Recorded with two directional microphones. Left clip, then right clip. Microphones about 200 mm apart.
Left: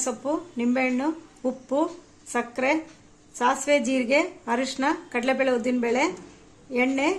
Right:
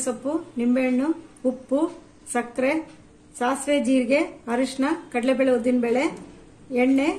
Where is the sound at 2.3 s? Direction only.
60° left (ahead or behind).